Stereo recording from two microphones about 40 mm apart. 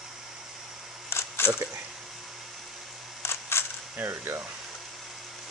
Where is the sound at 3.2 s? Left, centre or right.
Left.